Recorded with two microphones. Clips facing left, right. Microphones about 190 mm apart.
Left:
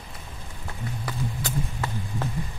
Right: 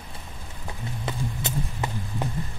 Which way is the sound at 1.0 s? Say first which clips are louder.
Right 1 dB; 20° right (ahead or behind).